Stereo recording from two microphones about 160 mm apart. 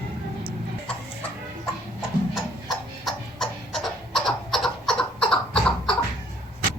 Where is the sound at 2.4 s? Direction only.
Centre (ahead or behind).